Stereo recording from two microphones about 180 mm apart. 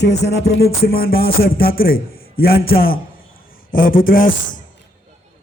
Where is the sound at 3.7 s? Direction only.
50° left (ahead or behind).